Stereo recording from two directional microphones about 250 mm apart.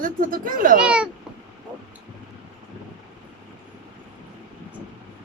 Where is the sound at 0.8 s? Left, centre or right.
Centre.